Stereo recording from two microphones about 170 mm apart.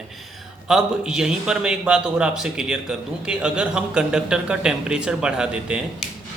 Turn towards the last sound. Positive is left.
turn(degrees=-5)  # may be behind; listen again after turning